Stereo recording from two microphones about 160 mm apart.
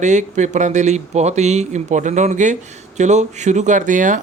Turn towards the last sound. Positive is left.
turn(degrees=-50)  # may be behind; listen again after turning